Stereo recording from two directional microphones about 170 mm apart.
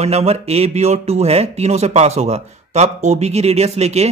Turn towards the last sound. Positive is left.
turn(degrees=-40)  # may be behind; listen again after turning